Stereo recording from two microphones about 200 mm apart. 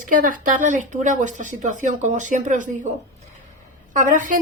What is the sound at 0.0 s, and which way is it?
Speech, 40° right (ahead or behind).